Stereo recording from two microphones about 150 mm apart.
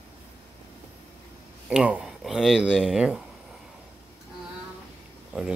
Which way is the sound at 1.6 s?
10° right (ahead or behind).